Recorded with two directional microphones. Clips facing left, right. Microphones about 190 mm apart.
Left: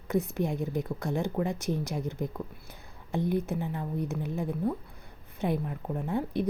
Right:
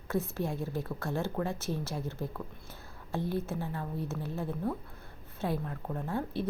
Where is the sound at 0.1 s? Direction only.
15° left (ahead or behind).